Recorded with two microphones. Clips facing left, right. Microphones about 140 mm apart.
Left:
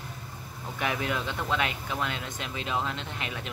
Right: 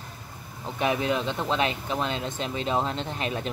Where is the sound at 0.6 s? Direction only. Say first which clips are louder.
Right 5 dB; 20° right (ahead or behind).